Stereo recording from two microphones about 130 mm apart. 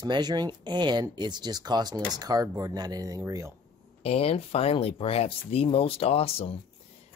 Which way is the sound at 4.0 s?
50° left (ahead or behind).